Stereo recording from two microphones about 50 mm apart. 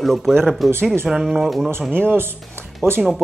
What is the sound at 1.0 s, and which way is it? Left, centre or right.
Speech, centre.